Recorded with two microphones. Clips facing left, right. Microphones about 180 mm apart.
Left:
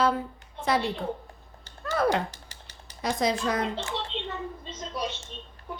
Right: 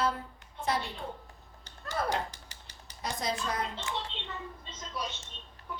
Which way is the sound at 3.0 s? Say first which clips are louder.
Left 8 dB; 90° left.